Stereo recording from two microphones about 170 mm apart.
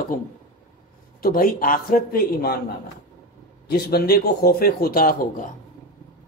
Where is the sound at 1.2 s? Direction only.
55° left (ahead or behind).